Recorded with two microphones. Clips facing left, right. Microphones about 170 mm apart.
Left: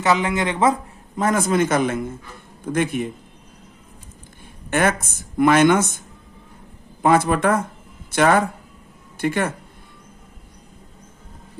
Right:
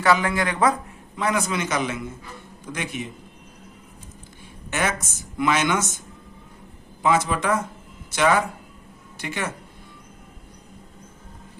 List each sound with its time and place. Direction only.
0.0 s speech: 20° left (ahead or behind)
1.1 s speech: 45° left (ahead or behind)
4.7 s speech: 55° left (ahead or behind)
7.0 s speech: 55° left (ahead or behind)